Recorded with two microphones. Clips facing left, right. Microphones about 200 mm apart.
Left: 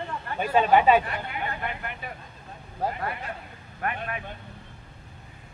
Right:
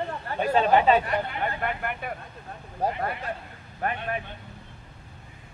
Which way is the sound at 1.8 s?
55° right (ahead or behind).